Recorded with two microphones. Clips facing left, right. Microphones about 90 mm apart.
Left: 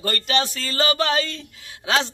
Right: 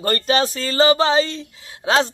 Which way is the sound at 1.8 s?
35° right (ahead or behind).